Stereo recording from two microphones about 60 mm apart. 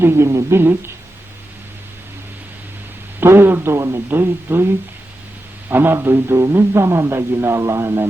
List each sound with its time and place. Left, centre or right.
0.0 s a man's voice: right
0.6 s a man's voice: right
3.2 s a sound: right
3.8 s a man's voice: right
4.1 s a man's voice: right